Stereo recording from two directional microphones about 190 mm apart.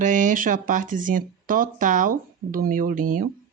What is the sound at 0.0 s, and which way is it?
Speech, 40° right (ahead or behind).